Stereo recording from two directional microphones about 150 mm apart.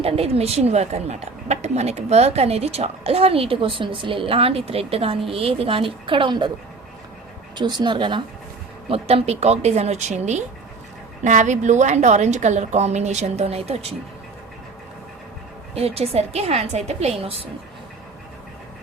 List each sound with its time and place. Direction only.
0.0 s a woman's voice: 40° right (ahead or behind)
7.5 s a woman's voice: 30° right (ahead or behind)
15.7 s a woman's voice: 40° right (ahead or behind)